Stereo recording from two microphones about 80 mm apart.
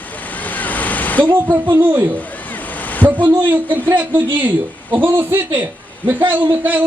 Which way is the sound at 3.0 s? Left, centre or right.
Right.